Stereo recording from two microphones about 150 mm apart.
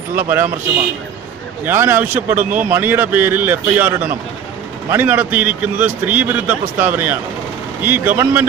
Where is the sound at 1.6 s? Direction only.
15° right (ahead or behind).